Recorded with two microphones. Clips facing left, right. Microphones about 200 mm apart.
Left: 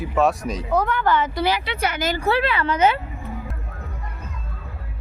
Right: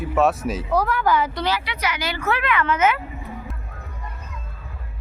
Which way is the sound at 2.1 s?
30° left (ahead or behind).